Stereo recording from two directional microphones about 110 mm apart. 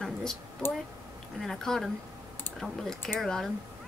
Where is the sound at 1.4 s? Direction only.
5° left (ahead or behind).